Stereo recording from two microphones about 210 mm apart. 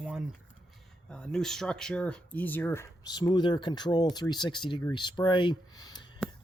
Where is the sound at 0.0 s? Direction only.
5° right (ahead or behind).